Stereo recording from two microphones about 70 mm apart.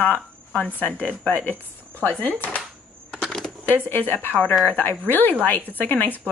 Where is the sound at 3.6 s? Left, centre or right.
Left.